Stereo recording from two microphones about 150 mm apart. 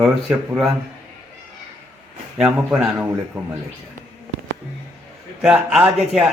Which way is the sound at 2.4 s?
10° right (ahead or behind).